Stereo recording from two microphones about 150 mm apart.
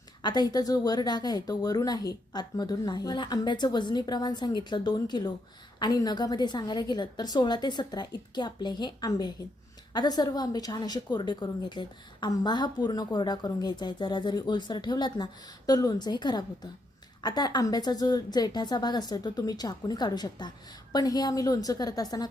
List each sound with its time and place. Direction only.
0.2 s a woman's voice: 30° left (ahead or behind)